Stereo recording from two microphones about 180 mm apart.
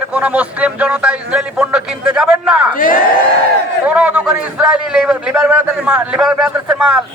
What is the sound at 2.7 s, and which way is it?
Speech, 50° left (ahead or behind).